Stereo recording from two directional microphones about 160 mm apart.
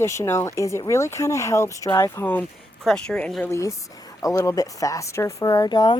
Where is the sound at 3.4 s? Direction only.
15° left (ahead or behind).